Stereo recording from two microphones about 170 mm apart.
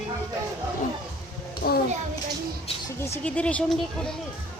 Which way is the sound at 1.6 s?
55° left (ahead or behind).